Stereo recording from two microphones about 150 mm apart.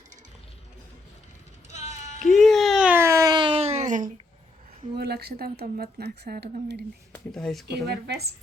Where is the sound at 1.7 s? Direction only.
50° left (ahead or behind).